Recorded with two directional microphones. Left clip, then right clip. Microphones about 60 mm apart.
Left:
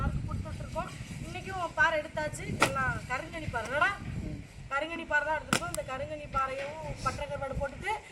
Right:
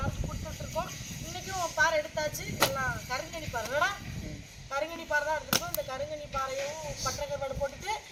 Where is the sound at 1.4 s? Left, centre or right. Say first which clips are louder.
Even; centre.